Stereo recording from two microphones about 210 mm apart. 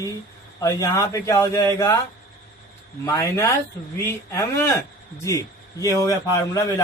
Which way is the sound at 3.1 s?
15° left (ahead or behind).